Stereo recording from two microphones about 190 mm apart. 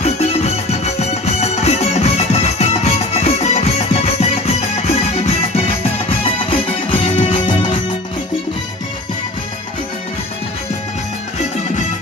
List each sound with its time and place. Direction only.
0.0 s music: 35° left (ahead or behind)
7.3 s music: 25° left (ahead or behind)